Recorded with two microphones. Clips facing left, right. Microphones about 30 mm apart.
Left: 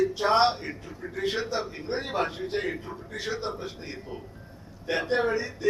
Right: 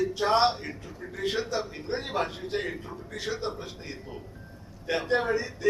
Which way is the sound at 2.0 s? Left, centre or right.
Centre.